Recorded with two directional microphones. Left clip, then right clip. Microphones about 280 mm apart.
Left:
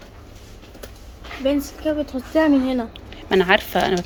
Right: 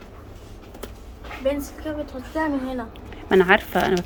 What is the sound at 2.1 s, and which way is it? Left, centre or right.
Speech, left.